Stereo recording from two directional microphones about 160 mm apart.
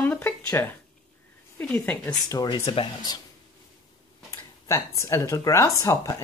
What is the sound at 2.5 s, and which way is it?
Speech, 35° left (ahead or behind).